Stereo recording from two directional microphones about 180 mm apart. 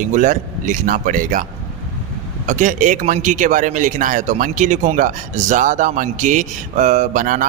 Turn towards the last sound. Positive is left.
turn(degrees=-45)  # may be behind; listen again after turning